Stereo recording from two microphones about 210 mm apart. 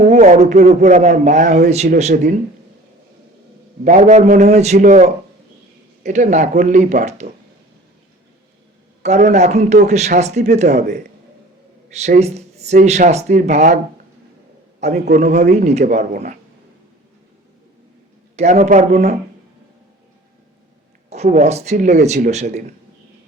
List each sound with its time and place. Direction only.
0.0 s speech: 35° right (ahead or behind)
3.8 s speech: 35° right (ahead or behind)
9.0 s speech: 35° right (ahead or behind)
11.9 s speech: 30° right (ahead or behind)
14.8 s a man's voice: 30° right (ahead or behind)
18.3 s speech: 30° right (ahead or behind)
21.1 s speech: 35° right (ahead or behind)